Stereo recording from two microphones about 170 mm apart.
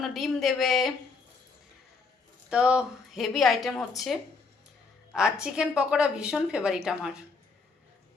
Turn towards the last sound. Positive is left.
turn(degrees=-5)  # may be behind; listen again after turning